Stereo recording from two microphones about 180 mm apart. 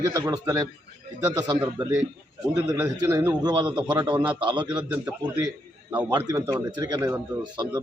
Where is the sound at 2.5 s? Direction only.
20° right (ahead or behind).